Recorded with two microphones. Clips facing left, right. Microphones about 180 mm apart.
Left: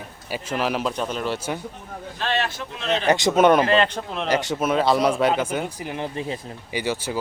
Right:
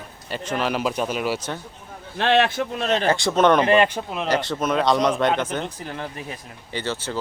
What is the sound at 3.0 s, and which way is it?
Speech, 20° left (ahead or behind).